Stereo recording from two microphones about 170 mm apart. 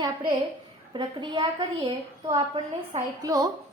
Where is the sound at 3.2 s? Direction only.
20° right (ahead or behind).